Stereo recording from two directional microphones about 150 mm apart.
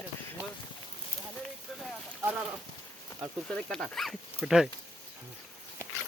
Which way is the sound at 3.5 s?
5° left (ahead or behind).